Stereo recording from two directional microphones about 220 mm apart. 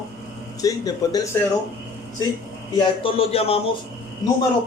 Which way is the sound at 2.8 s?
25° left (ahead or behind).